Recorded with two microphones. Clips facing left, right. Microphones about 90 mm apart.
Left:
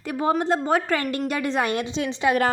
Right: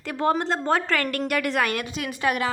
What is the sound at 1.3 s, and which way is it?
A woman's voice, 25° left (ahead or behind).